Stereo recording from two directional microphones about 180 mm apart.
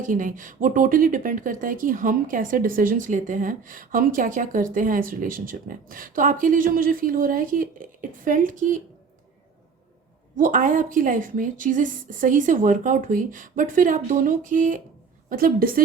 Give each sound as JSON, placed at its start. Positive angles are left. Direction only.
{"t": 0.0, "sound": "speech", "side_deg": -45}
{"t": 10.3, "sound": "speech", "side_deg": -45}